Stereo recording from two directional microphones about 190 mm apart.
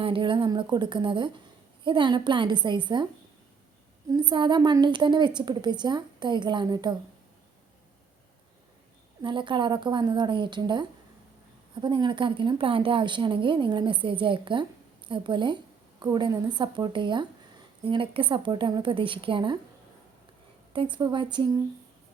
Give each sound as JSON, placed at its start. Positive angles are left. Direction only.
{"t": 0.0, "sound": "a woman's voice", "side_deg": -25}
{"t": 4.1, "sound": "a woman's voice", "side_deg": -25}
{"t": 9.2, "sound": "a woman's voice", "side_deg": -25}
{"t": 20.7, "sound": "a woman's voice", "side_deg": -25}